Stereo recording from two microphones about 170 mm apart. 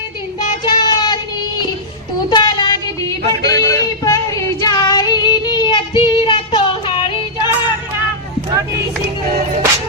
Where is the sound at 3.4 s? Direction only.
75° right (ahead or behind).